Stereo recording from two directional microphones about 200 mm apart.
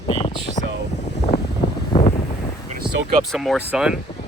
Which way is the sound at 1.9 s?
30° left (ahead or behind).